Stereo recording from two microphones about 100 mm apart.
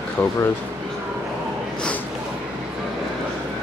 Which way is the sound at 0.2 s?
15° left (ahead or behind).